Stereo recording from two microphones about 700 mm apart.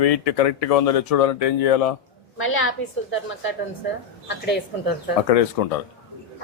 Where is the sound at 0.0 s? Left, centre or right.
Left.